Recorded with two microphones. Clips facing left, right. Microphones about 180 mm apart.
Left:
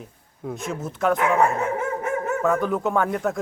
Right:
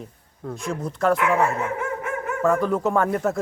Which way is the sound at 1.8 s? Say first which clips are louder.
Left 2 dB; 40° left (ahead or behind).